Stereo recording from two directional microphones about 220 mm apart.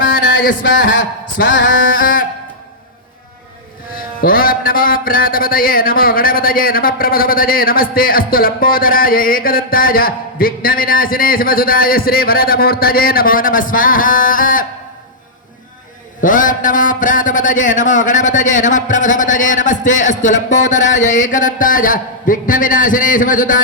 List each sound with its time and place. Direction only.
0.0 s a sound: 55° left (ahead or behind)
1.6 s music: 40° left (ahead or behind)
3.9 s music: 40° left (ahead or behind)
16.2 s music: 35° left (ahead or behind)